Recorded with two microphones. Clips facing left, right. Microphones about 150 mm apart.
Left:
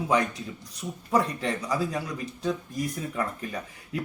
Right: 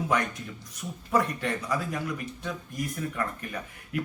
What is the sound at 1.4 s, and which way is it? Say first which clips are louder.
Speech: left 2 dB; 30° left (ahead or behind).